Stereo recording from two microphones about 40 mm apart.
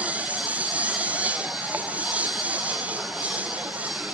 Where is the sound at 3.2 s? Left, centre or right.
Right.